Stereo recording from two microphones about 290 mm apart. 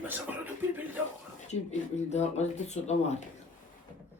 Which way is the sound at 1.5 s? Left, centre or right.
Left.